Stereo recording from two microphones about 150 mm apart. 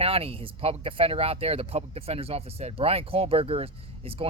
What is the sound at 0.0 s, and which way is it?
Speech, 40° right (ahead or behind).